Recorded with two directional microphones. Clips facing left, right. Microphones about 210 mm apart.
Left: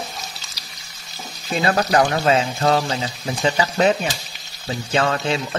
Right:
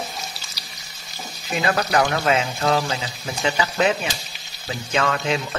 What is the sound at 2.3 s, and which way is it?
Speech, 30° left (ahead or behind).